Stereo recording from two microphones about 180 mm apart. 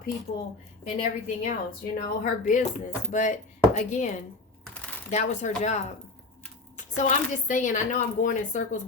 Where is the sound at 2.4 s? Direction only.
40° left (ahead or behind).